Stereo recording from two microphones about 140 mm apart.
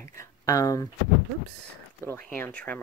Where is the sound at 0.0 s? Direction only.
20° left (ahead or behind).